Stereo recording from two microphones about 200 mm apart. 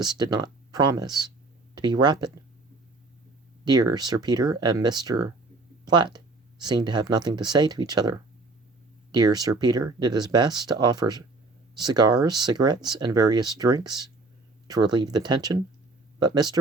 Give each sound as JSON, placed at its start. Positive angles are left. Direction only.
{"t": 0.0, "sound": "speech", "side_deg": -20}
{"t": 3.6, "sound": "speech", "side_deg": -20}
{"t": 9.1, "sound": "speech", "side_deg": -20}